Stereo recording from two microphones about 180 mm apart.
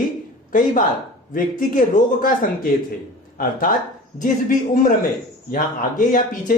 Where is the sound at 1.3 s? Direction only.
50° left (ahead or behind).